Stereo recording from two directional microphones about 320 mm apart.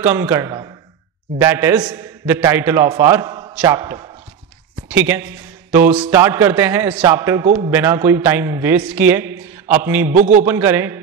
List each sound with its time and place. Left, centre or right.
0.0 s a man's voice: centre
10.1 s a man's voice: right
10.4 s a man's voice: centre